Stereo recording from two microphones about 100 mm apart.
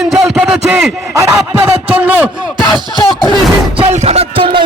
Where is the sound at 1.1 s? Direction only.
30° right (ahead or behind).